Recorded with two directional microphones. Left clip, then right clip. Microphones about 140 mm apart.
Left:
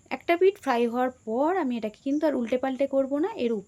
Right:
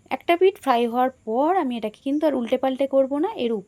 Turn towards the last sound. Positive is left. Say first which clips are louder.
# right 3 dB
turn(degrees=-20)  # may be behind; listen again after turning